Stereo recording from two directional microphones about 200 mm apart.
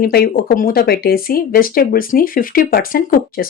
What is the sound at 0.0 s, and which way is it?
Speech, 50° left (ahead or behind).